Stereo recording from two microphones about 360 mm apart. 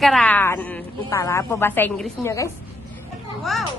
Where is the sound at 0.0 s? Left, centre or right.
Centre.